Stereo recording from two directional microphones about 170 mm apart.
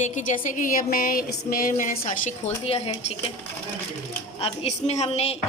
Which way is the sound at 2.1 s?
45° left (ahead or behind).